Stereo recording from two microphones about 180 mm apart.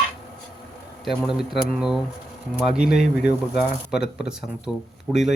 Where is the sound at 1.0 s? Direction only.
Centre (ahead or behind).